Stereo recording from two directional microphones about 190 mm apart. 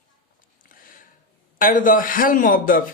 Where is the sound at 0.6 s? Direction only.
45° left (ahead or behind).